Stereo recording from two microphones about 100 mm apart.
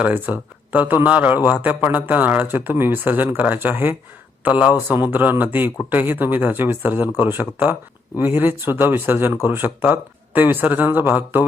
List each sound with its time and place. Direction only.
0.0 s speech: 15° right (ahead or behind)